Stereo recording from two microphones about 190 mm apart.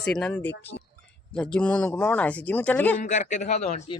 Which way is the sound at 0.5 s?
65° left (ahead or behind).